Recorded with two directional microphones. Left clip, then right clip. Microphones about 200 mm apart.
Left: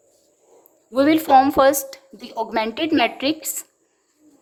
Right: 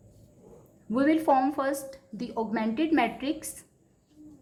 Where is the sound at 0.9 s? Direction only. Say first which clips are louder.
Left 9 dB; 45° left (ahead or behind).